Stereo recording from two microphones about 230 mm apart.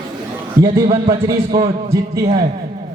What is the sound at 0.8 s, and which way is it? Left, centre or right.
A man's voice, right.